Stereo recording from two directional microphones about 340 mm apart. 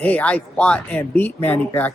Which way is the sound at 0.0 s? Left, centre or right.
Centre.